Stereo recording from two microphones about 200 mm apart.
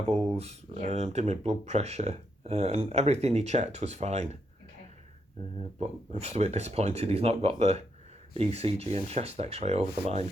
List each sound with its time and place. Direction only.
0.1 s speech: 30° right (ahead or behind)
5.5 s speech: 30° right (ahead or behind)